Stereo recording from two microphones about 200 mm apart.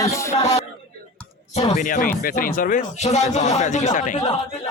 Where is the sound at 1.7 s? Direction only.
40° left (ahead or behind).